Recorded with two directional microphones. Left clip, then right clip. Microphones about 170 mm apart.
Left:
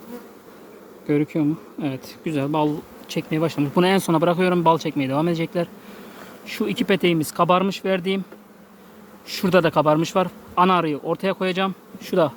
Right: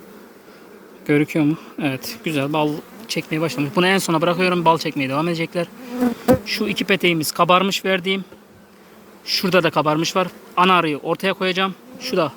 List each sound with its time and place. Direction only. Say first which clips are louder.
1.0 s speech: right 3 dB; centre (ahead or behind)
9.2 s speech: right 1 dB; 25° left (ahead or behind)
11.9 s insect: left 1 dB; 25° left (ahead or behind)